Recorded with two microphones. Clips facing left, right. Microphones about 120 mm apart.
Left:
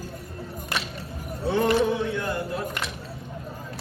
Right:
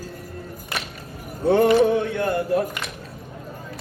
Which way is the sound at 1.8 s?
55° right (ahead or behind).